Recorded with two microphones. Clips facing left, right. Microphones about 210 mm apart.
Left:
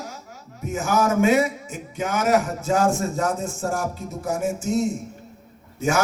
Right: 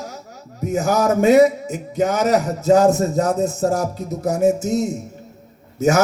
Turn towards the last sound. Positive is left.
turn(degrees=-40)  # may be behind; listen again after turning